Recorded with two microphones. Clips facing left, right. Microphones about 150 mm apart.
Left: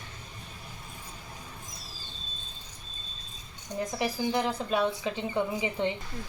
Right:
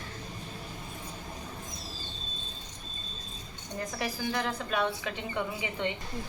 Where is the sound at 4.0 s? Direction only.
20° left (ahead or behind).